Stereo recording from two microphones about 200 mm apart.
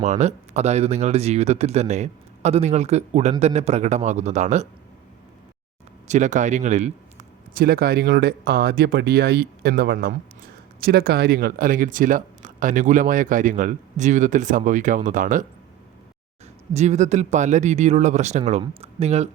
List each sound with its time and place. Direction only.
0.0 s speech: 35° right (ahead or behind)
6.1 s speech: 35° right (ahead or behind)
16.7 s speech: 35° right (ahead or behind)